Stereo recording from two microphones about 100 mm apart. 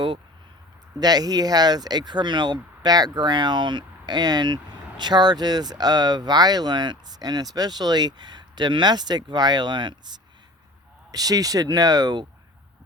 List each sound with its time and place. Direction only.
0.9 s speech: 40° right (ahead or behind)
11.1 s speech: 40° right (ahead or behind)